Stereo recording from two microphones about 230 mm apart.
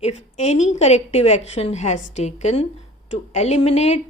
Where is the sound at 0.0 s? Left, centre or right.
Left.